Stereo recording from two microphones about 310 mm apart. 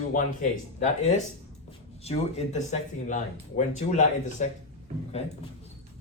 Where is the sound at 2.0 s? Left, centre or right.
Left.